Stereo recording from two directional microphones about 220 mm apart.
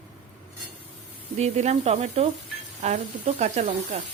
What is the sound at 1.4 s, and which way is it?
Speech, 30° right (ahead or behind).